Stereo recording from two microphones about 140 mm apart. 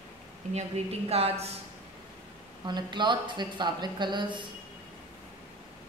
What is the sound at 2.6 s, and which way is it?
Speech, 30° right (ahead or behind).